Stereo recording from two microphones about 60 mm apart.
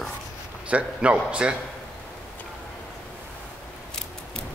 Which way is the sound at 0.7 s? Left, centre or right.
Right.